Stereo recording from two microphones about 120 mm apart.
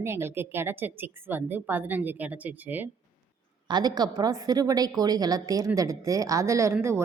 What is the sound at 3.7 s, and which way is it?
A woman's voice, 35° right (ahead or behind).